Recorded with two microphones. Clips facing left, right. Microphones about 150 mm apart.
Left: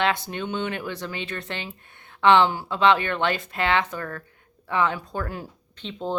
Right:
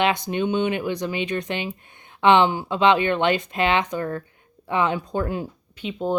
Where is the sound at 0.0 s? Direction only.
15° right (ahead or behind).